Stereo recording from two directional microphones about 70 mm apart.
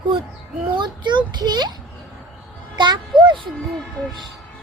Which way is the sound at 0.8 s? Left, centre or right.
Right.